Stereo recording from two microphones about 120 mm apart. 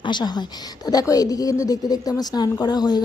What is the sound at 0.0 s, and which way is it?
A woman's voice, 40° left (ahead or behind).